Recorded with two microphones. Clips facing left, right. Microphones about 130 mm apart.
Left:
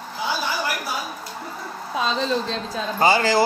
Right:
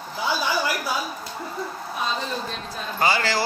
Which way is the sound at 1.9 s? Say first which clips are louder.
Left 6 dB; 90° left.